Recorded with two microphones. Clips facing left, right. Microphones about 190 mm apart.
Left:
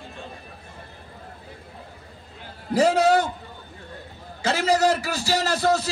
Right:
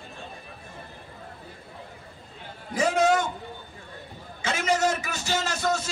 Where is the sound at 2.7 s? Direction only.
35° left (ahead or behind).